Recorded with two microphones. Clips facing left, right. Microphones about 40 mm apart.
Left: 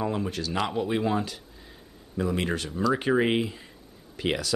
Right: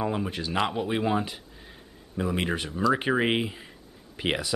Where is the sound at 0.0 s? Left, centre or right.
Centre.